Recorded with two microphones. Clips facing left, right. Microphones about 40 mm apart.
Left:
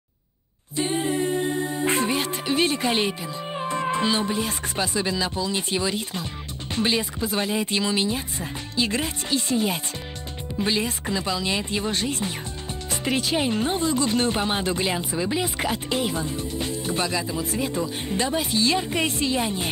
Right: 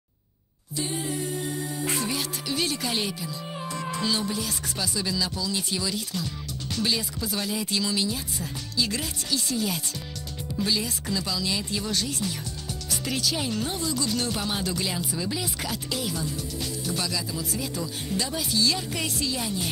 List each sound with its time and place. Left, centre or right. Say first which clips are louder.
0.7 s music: left 6 dB; left
6.7 s speech: left 4 dB; left